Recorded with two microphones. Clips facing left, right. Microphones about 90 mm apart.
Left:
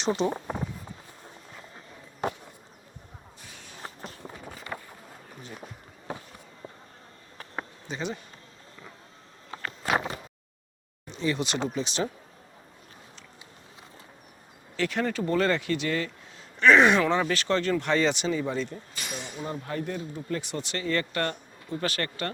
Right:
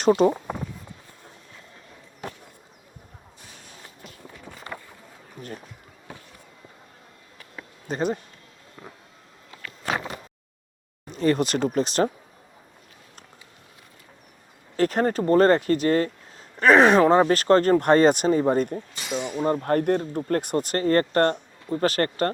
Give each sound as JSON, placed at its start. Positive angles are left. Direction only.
{"t": 0.2, "sound": "speech", "side_deg": -50}
{"t": 3.8, "sound": "run", "side_deg": 40}
{"t": 4.7, "sound": "boat", "side_deg": 20}
{"t": 7.9, "sound": "speech", "side_deg": -45}
{"t": 9.5, "sound": "a sound", "side_deg": 40}
{"t": 11.0, "sound": "speech", "side_deg": -50}
{"t": 14.8, "sound": "speech", "side_deg": -40}
{"t": 19.0, "sound": "speech", "side_deg": -15}
{"t": 19.4, "sound": "speech", "side_deg": -50}